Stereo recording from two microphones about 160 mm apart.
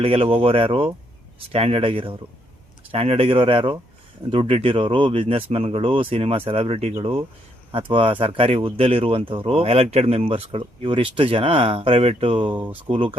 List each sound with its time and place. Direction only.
0.0 s speech: 40° right (ahead or behind)